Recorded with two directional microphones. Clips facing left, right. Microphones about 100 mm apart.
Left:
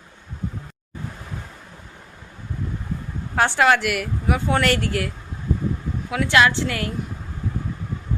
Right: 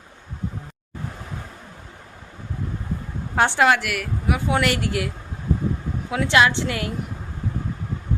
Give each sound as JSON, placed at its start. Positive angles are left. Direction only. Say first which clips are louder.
{"t": 3.3, "sound": "a woman's voice", "louder": "right 1 dB", "side_deg": -20}
{"t": 3.7, "sound": "speech", "louder": "left 2 dB", "side_deg": 0}
{"t": 4.4, "sound": "a woman's voice", "louder": "left 1 dB", "side_deg": -10}